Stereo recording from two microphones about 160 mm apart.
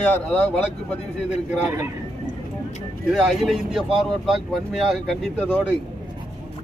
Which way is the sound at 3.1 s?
Centre (ahead or behind).